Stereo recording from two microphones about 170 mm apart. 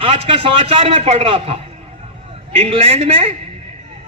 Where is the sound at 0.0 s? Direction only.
30° right (ahead or behind).